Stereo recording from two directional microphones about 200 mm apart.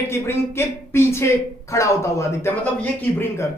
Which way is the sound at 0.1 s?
10° left (ahead or behind).